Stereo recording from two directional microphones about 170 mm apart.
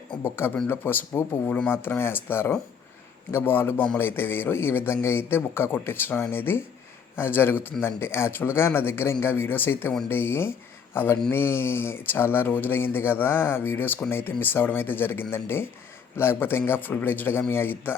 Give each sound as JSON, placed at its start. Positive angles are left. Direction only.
{"t": 0.2, "sound": "speech", "side_deg": 15}